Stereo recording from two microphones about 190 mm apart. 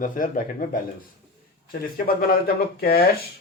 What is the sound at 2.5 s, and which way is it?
Speech, 55° left (ahead or behind).